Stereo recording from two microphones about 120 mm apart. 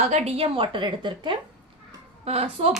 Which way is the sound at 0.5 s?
45° right (ahead or behind).